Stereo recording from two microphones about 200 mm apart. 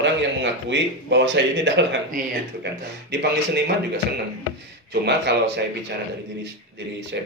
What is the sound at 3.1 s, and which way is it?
Speech, 60° right (ahead or behind).